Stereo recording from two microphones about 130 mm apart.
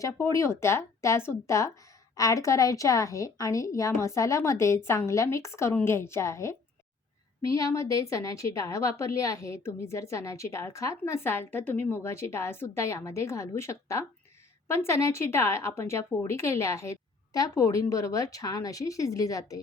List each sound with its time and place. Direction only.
0.0 s a woman's voice: 25° left (ahead or behind)